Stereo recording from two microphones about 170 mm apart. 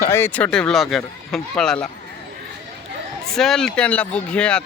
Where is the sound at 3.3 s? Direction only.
Centre (ahead or behind).